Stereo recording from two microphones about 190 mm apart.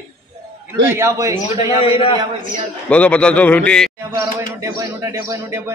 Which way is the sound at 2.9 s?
5° left (ahead or behind).